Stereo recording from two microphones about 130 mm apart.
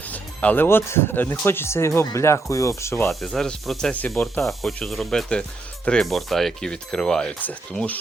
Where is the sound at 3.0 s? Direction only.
Centre (ahead or behind).